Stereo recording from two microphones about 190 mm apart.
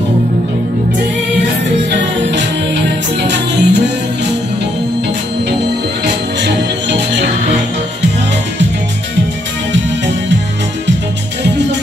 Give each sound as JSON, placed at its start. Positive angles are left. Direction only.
{"t": 1.9, "sound": "music", "side_deg": -70}
{"t": 6.0, "sound": "music", "side_deg": -65}